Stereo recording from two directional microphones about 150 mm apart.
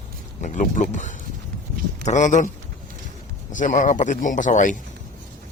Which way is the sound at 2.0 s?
55° left (ahead or behind).